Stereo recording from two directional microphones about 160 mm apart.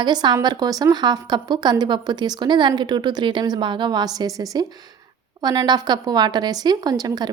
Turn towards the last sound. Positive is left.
turn(degrees=-25)  # may be behind; listen again after turning